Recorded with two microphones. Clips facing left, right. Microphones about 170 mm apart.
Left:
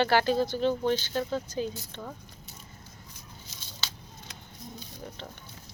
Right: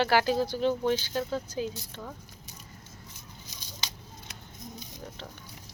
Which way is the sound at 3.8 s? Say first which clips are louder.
Even; 15° right (ahead or behind).